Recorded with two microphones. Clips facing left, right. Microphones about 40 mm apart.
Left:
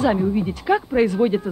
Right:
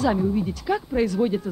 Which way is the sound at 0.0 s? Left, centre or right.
Left.